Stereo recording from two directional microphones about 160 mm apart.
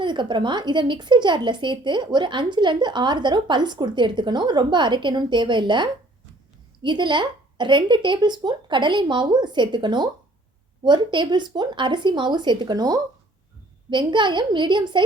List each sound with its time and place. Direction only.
0.0 s speech: 30° right (ahead or behind)